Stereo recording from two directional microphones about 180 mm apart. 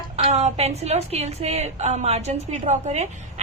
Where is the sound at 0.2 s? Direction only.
35° right (ahead or behind).